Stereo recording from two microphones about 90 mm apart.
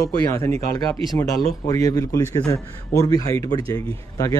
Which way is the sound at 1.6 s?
45° left (ahead or behind).